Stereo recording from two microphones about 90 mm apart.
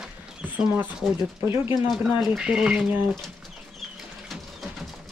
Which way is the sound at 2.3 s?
10° right (ahead or behind).